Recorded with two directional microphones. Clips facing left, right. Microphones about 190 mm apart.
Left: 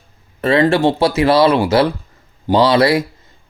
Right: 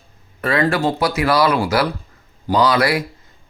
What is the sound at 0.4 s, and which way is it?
Speech, 25° left (ahead or behind).